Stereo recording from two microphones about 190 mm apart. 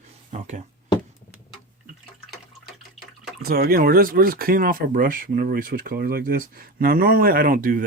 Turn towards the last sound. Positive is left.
turn(degrees=-45)  # may be behind; listen again after turning